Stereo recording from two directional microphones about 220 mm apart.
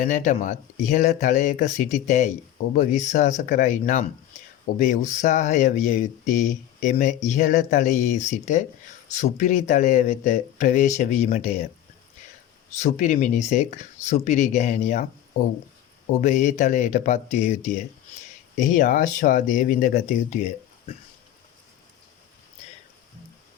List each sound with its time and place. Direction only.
0.0 s speech: 35° left (ahead or behind)
12.7 s speech: 35° left (ahead or behind)
16.2 s speech: 35° left (ahead or behind)